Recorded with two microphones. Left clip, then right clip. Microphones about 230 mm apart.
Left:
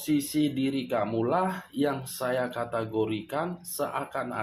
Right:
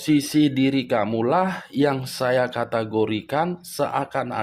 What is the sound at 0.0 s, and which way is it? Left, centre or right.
Speech, right.